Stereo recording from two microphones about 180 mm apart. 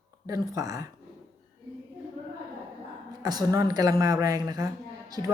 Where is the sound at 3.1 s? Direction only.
20° right (ahead or behind).